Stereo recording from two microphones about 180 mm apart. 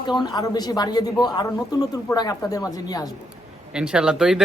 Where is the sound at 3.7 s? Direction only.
5° right (ahead or behind).